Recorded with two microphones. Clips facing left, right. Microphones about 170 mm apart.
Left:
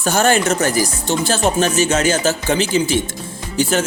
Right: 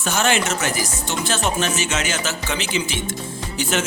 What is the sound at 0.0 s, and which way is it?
Speech, 40° left (ahead or behind).